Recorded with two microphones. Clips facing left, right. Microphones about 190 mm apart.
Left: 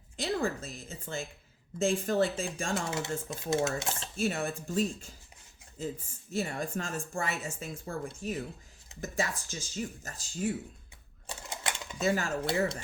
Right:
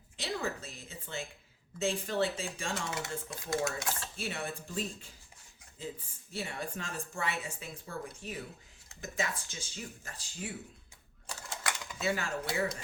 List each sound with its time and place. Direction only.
0.2 s speech: 45° left (ahead or behind)
2.9 s speech: 25° left (ahead or behind)
4.2 s speech: 45° left (ahead or behind)
11.3 s typing: 25° left (ahead or behind)
11.9 s speech: 45° left (ahead or behind)
12.5 s speech: 30° left (ahead or behind)